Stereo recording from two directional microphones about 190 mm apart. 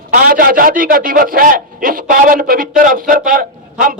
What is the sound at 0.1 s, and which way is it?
A man's voice, 50° right (ahead or behind).